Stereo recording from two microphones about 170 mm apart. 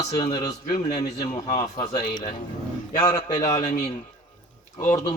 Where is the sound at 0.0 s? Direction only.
30° left (ahead or behind).